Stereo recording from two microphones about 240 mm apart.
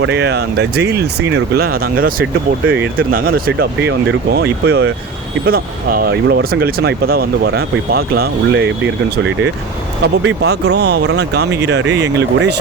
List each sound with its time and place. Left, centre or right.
0.0 s speech: right
2.6 s speech: right
3.1 s speech: right
10.0 s speech: right